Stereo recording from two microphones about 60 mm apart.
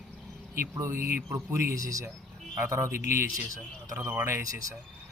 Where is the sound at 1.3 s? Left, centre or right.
Right.